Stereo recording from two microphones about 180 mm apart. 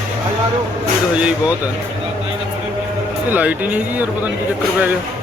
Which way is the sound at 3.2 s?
10° right (ahead or behind).